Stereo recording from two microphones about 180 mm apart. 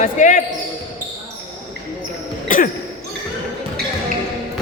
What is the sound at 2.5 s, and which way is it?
Throat clearing, 45° left (ahead or behind).